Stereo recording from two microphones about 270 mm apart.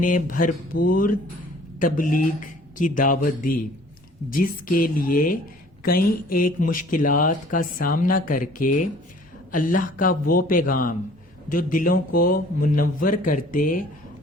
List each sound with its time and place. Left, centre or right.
0.0 s mantra: left
1.8 s mantra: left
2.7 s speech: left